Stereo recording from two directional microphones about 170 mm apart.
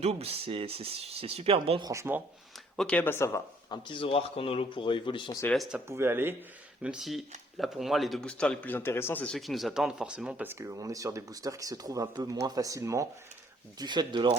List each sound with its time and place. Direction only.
0.0 s speech: 35° right (ahead or behind)
1.9 s speech: 15° right (ahead or behind)
2.7 s speech: 5° left (ahead or behind)
3.8 s speech: 30° left (ahead or behind)
5.9 s speech: 15° right (ahead or behind)
6.8 s speech: 5° right (ahead or behind); by 14.3 s 25° right (ahead or behind)